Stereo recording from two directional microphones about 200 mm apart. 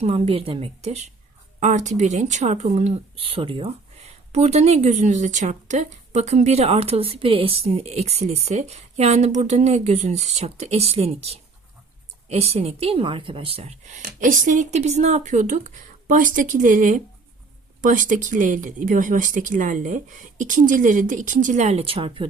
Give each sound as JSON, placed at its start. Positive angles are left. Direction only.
{"t": 0.0, "sound": "a woman's voice", "side_deg": -30}